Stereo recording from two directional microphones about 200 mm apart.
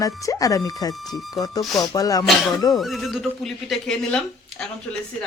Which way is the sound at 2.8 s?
Centre (ahead or behind).